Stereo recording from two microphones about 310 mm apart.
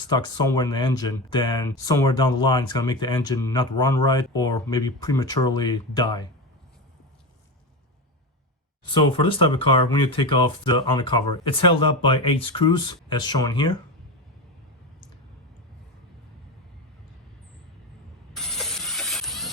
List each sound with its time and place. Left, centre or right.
0.1 s speech: centre
8.9 s speech: centre
18.3 s mechanisms: centre